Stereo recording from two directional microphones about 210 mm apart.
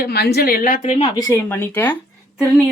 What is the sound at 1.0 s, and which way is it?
Speech, 15° left (ahead or behind).